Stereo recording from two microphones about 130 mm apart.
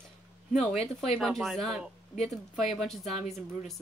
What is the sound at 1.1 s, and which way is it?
Speech, centre (ahead or behind).